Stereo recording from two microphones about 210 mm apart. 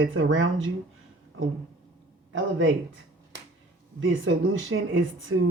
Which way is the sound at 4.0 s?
65° right (ahead or behind).